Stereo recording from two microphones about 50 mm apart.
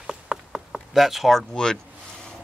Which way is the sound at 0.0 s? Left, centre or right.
Centre.